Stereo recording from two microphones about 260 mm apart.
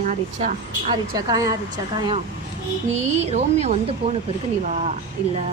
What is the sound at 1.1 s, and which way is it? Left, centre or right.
A woman's voice, centre.